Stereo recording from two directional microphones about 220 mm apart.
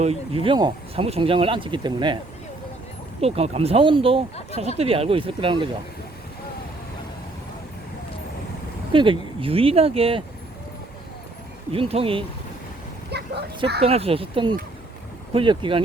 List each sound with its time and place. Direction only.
0.0 s speech: 25° right (ahead or behind)
3.2 s speech: 30° right (ahead or behind)
8.9 s speech: 25° right (ahead or behind)
11.7 s speech: 25° right (ahead or behind)
13.1 s speech: 50° right (ahead or behind)
13.8 s speech: 25° right (ahead or behind)